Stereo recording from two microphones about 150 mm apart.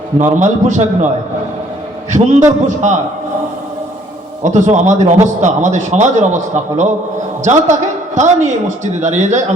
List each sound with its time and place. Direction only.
0.2 s a man's voice: 55° right (ahead or behind)
4.4 s a man's voice: 50° right (ahead or behind)